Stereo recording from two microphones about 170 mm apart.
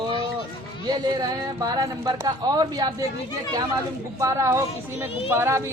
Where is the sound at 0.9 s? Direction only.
25° right (ahead or behind).